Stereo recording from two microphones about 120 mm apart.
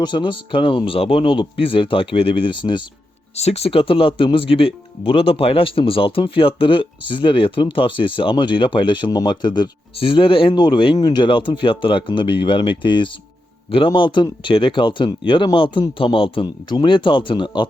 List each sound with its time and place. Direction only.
0.0 s speech: 40° left (ahead or behind)
3.3 s speech: 60° left (ahead or behind); by 9.6 s 35° left (ahead or behind)
9.9 s speech: 45° left (ahead or behind)